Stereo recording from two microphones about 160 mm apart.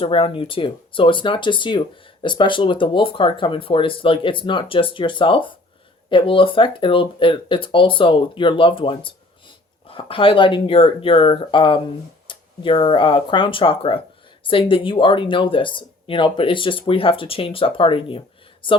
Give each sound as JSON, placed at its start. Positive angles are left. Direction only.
{"t": 0.0, "sound": "speech", "side_deg": 35}